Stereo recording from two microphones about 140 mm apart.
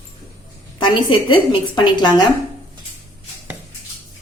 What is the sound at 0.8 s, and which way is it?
A woman's voice, 35° left (ahead or behind).